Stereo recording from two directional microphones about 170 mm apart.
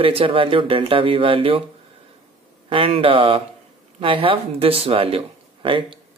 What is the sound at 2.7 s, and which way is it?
Speech, 30° right (ahead or behind).